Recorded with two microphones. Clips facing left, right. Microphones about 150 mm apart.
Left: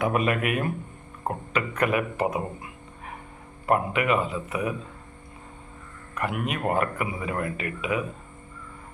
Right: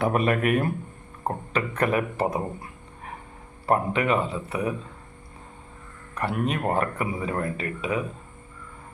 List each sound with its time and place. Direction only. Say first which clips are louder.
0.0 s speech: right 2 dB; 40° right (ahead or behind)
3.7 s speech: even; 30° right (ahead or behind)
6.1 s speech: right 2 dB; 35° right (ahead or behind)